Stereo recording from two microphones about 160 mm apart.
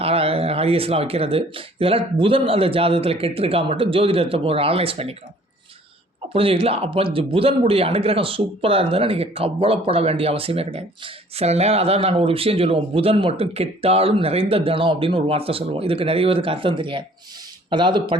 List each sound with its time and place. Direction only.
0.0 s speech: 35° right (ahead or behind)
6.3 s speech: 35° right (ahead or behind)